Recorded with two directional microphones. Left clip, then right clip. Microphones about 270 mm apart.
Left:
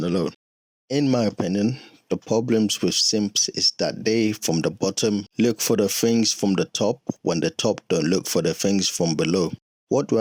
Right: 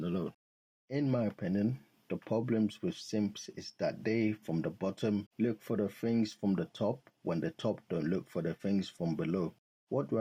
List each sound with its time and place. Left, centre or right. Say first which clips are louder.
0.0 s a sound: left 14 dB; left
0.9 s speech: left 12 dB; left
8.7 s speech: left 14 dB; left